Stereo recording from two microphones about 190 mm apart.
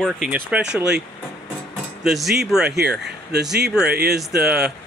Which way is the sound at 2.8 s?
60° right (ahead or behind).